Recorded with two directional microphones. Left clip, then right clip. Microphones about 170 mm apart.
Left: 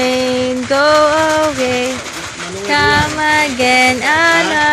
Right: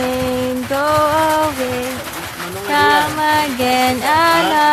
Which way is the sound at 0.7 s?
15° left (ahead or behind).